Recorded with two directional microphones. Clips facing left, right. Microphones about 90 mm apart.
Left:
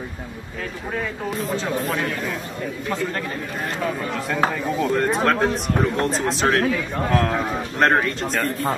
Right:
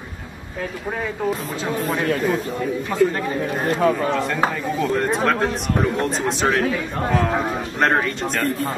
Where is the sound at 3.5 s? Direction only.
40° right (ahead or behind).